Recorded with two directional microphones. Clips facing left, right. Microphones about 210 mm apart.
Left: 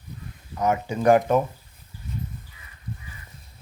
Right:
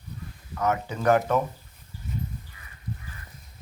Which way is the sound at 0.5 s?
15° left (ahead or behind).